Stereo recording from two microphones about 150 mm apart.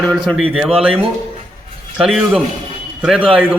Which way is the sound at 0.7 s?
40° right (ahead or behind).